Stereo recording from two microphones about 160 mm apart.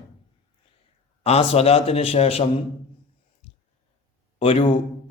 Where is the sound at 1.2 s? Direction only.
40° left (ahead or behind).